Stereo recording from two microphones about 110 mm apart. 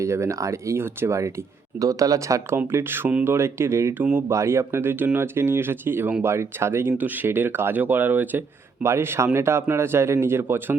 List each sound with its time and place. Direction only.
0.0 s speech: 25° right (ahead or behind)